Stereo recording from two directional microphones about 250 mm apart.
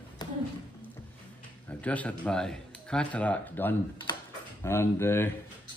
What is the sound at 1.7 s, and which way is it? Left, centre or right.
A man's voice, centre.